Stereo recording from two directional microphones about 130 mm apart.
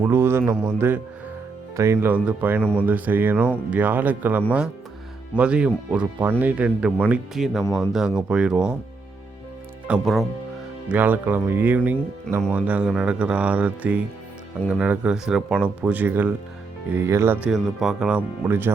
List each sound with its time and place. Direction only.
0.0 s a sound: 15° right (ahead or behind)
0.6 s speech: 15° right (ahead or behind)
9.8 s speech: 5° right (ahead or behind)
17.5 s speech: 5° right (ahead or behind)
18.4 s speech: 15° right (ahead or behind)